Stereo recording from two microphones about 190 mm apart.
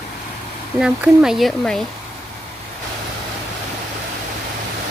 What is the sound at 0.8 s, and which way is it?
Speech, 5° right (ahead or behind).